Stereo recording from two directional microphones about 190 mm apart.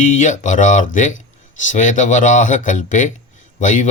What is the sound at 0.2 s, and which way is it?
Speech, 40° left (ahead or behind).